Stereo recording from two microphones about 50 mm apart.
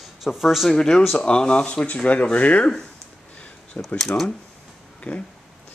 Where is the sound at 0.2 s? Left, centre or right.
Centre.